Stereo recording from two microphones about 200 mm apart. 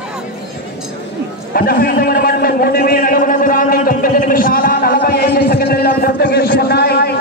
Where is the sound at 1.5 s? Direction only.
50° left (ahead or behind).